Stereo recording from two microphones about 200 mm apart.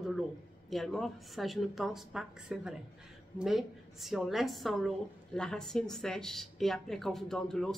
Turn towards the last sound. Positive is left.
turn(degrees=0)  # may be behind; listen again after turning